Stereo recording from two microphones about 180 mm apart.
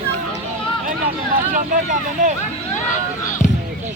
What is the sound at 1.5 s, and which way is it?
Vehicle, 45° right (ahead or behind).